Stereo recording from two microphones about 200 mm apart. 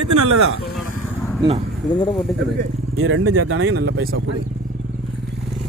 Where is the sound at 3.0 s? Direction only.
90° right.